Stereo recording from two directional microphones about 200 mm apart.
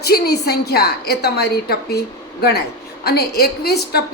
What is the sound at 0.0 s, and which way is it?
A woman's voice, 55° left (ahead or behind).